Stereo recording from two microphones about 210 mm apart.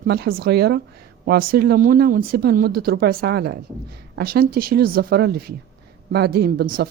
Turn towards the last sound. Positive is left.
turn(degrees=-45)  # may be behind; listen again after turning